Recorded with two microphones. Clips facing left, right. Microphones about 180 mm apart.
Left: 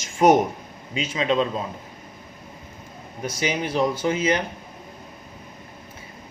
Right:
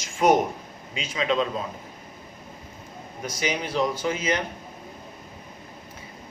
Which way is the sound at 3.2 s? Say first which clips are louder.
Left 3 dB; 30° left (ahead or behind).